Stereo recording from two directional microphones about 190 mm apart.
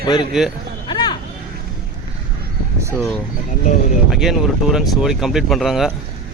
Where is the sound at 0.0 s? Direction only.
25° left (ahead or behind).